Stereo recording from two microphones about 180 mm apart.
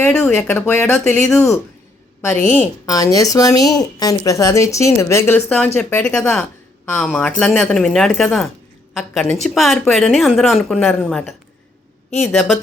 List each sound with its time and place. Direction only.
0.0 s a woman's voice: 5° left (ahead or behind)
2.8 s a woman's voice: 20° left (ahead or behind); by 12.5 s centre (ahead or behind)